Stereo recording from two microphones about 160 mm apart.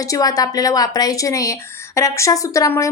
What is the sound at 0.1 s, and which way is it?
A woman's voice, 20° left (ahead or behind).